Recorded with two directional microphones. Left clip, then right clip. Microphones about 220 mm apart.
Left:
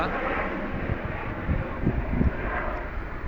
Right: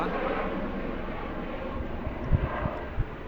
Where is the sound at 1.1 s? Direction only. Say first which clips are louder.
Left 2 dB; 55° right (ahead or behind).